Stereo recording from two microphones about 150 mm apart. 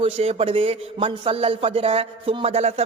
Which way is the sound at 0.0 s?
40° right (ahead or behind).